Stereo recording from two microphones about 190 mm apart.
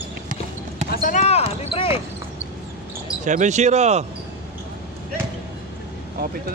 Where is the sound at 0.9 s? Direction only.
45° left (ahead or behind); by 1.9 s 30° left (ahead or behind).